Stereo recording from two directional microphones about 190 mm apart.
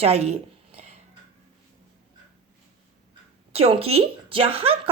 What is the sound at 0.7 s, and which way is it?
Music, 35° right (ahead or behind).